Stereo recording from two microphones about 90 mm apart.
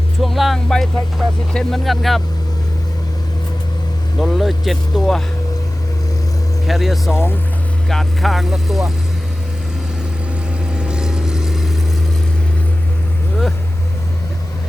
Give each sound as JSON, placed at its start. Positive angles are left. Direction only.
{"t": 0.2, "sound": "vehicle", "side_deg": 0}
{"t": 1.2, "sound": "speech", "side_deg": 0}
{"t": 4.2, "sound": "speech", "side_deg": 0}
{"t": 6.7, "sound": "speech", "side_deg": 0}
{"t": 7.1, "sound": "speech", "side_deg": 25}
{"t": 7.9, "sound": "speech", "side_deg": 0}
{"t": 10.8, "sound": "vehicle", "side_deg": -10}